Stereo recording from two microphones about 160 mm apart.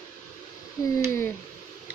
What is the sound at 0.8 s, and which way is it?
Speech, 20° left (ahead or behind).